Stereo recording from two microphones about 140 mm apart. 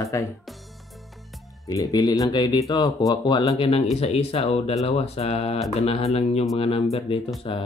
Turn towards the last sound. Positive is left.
turn(degrees=40)  # may be behind; listen again after turning